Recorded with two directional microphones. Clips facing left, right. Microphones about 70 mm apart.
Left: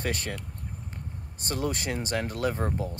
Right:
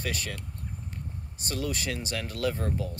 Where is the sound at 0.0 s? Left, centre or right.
Left.